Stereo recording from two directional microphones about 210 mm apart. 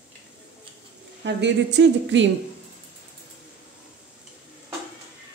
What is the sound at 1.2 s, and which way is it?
Speech, 55° right (ahead or behind).